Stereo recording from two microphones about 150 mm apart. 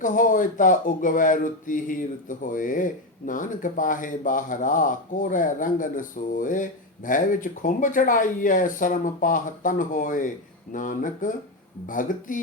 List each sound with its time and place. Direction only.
0.0 s speech: 65° left (ahead or behind)